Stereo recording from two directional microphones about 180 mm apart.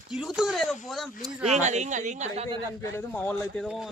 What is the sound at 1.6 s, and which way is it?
Speech, 40° right (ahead or behind).